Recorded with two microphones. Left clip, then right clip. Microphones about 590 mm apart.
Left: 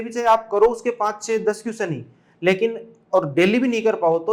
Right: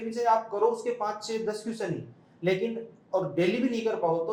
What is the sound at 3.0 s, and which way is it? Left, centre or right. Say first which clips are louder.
Speech: left 9 dB; left.